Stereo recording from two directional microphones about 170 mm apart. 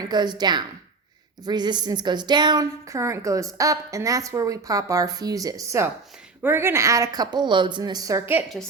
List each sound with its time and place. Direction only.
0.0 s a woman's voice: 25° right (ahead or behind)